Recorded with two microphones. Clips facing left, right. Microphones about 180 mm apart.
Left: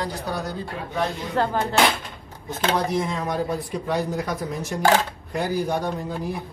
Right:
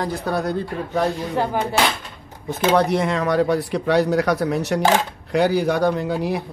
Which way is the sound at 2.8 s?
70° right (ahead or behind).